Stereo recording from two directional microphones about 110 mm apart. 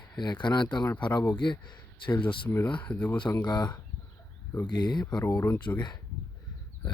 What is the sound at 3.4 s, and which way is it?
Speech, 40° left (ahead or behind).